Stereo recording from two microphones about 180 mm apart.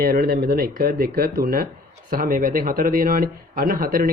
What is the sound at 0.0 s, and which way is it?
Speech, 60° right (ahead or behind).